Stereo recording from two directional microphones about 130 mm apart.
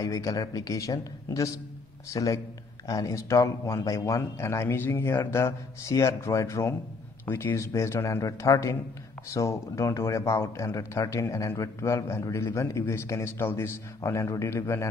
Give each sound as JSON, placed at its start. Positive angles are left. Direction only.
{"t": 0.0, "sound": "speech", "side_deg": 25}